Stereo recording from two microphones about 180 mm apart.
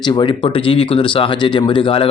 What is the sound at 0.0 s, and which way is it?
Speech, 25° left (ahead or behind).